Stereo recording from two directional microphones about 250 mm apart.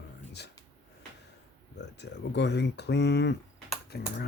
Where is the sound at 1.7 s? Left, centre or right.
Left.